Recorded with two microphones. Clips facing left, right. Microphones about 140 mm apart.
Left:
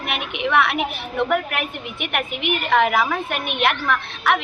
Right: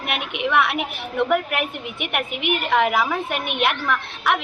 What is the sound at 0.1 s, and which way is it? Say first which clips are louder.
A woman's voice: left 1 dB; 10° right (ahead or behind).